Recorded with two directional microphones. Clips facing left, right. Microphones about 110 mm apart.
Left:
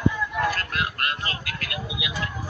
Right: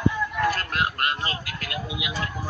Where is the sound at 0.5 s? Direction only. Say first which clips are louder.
Right 2 dB; 30° right (ahead or behind).